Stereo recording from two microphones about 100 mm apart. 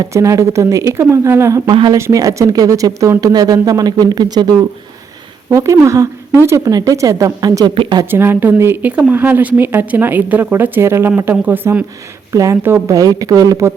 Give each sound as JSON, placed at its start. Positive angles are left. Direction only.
{"t": 0.0, "sound": "speech", "side_deg": -35}
{"t": 5.5, "sound": "speech", "side_deg": -30}
{"t": 8.1, "sound": "speech", "side_deg": -20}
{"t": 12.3, "sound": "speech", "side_deg": -30}